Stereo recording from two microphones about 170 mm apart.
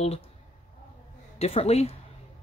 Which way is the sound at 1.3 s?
35° left (ahead or behind).